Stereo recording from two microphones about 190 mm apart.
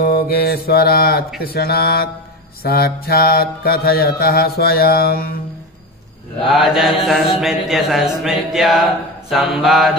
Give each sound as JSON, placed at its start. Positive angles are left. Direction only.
{"t": 0.1, "sound": "mantra", "side_deg": 55}
{"t": 6.5, "sound": "mantra", "side_deg": 0}